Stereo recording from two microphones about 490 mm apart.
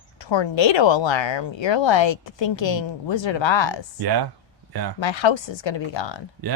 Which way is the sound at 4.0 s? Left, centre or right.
Right.